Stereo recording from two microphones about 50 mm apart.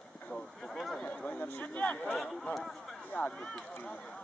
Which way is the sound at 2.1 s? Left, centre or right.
Centre.